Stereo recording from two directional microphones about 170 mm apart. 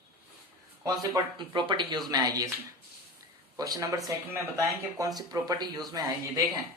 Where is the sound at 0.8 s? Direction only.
20° right (ahead or behind).